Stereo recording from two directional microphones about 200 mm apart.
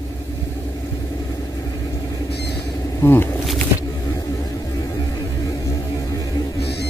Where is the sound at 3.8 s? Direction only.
20° left (ahead or behind).